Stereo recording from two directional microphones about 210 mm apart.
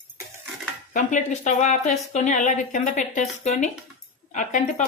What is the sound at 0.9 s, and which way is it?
Speech, 35° left (ahead or behind).